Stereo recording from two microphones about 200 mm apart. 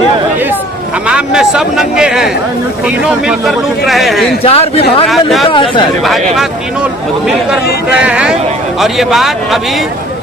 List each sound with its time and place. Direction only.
1.0 s speech: 5° right (ahead or behind)
4.4 s speech: 30° left (ahead or behind)
6.1 s speech: centre (ahead or behind)
7.9 s speech: 5° right (ahead or behind)